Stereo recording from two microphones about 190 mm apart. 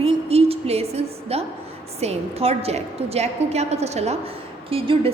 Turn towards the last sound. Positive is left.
turn(degrees=-30)  # may be behind; listen again after turning